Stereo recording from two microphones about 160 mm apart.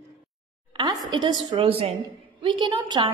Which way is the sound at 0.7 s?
25° right (ahead or behind).